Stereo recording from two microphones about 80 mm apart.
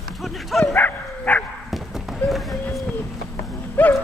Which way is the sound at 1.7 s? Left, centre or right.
Centre.